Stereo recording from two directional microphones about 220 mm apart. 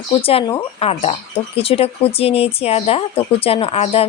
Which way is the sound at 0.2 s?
25° left (ahead or behind).